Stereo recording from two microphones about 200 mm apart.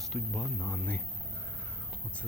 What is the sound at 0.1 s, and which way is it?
Speech, centre (ahead or behind).